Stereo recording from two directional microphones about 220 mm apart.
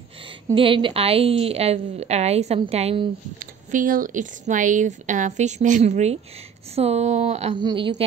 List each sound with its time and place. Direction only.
0.5 s a woman's voice: 25° right (ahead or behind)
3.3 s a woman's voice: 40° right (ahead or behind); by 8.0 s 25° right (ahead or behind)